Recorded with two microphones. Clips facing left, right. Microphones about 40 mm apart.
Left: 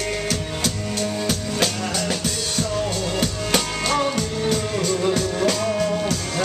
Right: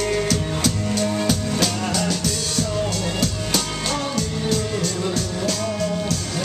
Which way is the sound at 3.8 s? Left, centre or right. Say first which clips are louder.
Left 3 dB; centre.